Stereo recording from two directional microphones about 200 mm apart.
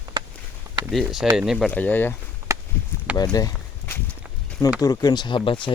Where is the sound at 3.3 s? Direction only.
15° left (ahead or behind).